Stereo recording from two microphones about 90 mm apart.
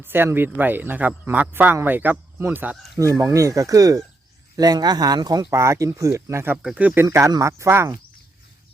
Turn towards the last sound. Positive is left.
turn(degrees=-30)  # may be behind; listen again after turning